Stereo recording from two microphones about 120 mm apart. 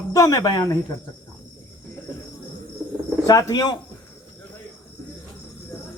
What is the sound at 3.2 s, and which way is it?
Speech, 30° left (ahead or behind).